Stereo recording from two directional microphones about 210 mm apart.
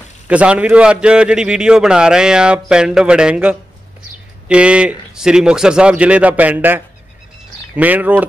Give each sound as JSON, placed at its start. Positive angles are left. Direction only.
{"t": 0.3, "sound": "a man's voice", "side_deg": -5}